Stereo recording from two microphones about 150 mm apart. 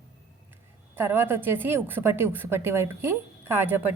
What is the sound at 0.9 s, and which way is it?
A woman's voice, 15° right (ahead or behind).